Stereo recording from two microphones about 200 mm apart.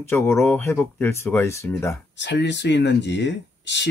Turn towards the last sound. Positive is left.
turn(degrees=60)  # may be behind; listen again after turning